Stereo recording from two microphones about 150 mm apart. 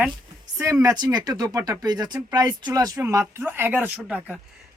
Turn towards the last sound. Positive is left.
turn(degrees=-5)  # may be behind; listen again after turning